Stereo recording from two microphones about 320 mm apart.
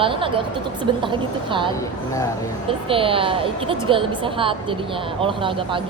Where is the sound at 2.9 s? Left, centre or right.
Centre.